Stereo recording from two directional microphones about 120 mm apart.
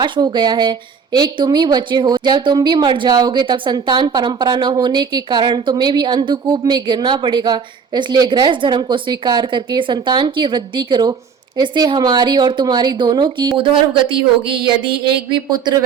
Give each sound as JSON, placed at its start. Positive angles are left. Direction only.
{"t": 0.0, "sound": "speech", "side_deg": -40}